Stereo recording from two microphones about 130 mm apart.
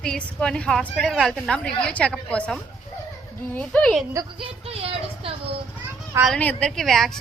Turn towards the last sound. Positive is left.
turn(degrees=5)  # may be behind; listen again after turning